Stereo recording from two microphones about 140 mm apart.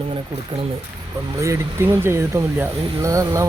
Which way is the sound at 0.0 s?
40° right (ahead or behind).